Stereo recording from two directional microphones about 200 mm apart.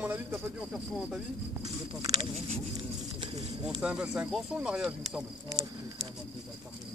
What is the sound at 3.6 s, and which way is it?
Speech, 5° right (ahead or behind).